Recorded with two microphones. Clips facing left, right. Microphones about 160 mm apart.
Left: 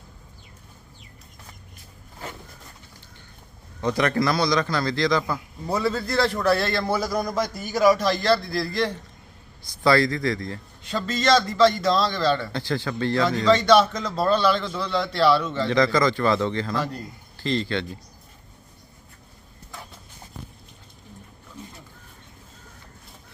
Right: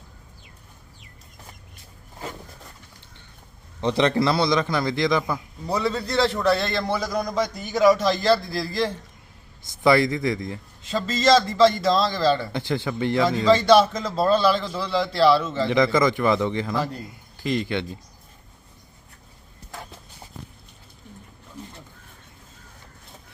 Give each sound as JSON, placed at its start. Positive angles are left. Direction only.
{"t": 3.8, "sound": "a man's voice", "side_deg": -25}
{"t": 5.6, "sound": "a man's voice", "side_deg": 0}
{"t": 9.8, "sound": "a man's voice", "side_deg": -20}
{"t": 11.1, "sound": "a man's voice", "side_deg": 0}
{"t": 12.5, "sound": "a man's voice", "side_deg": -20}
{"t": 13.2, "sound": "a man's voice", "side_deg": -5}
{"t": 15.7, "sound": "a man's voice", "side_deg": -20}